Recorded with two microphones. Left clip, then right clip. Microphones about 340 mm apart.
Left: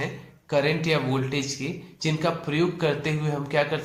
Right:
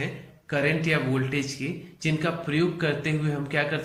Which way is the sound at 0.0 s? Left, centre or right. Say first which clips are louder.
Left 1 dB; centre.